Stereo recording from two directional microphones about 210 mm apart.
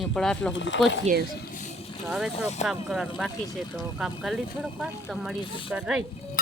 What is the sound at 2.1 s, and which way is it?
Speech, centre (ahead or behind).